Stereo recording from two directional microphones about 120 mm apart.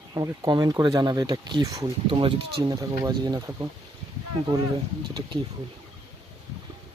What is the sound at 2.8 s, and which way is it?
Speech, 35° right (ahead or behind).